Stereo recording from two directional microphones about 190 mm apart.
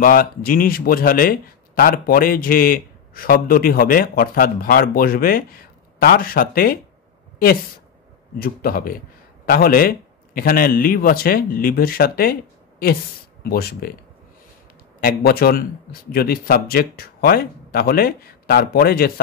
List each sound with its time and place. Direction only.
0.0 s a man's voice: 50° left (ahead or behind)
8.4 s a man's voice: 50° left (ahead or behind)
15.0 s a man's voice: 50° left (ahead or behind)